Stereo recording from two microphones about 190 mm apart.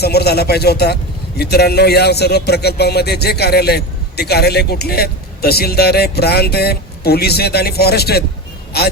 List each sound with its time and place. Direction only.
0.0 s speech: 60° left (ahead or behind)